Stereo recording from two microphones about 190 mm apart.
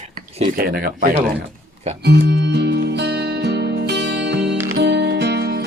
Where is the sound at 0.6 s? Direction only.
50° right (ahead or behind).